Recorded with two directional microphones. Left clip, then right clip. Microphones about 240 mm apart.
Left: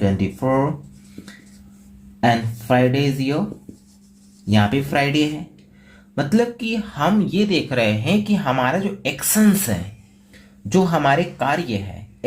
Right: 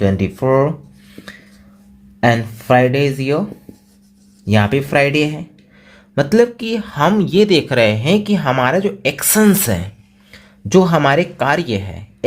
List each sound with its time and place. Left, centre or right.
0.0 s speech: right
2.2 s speech: right
4.4 s speech: right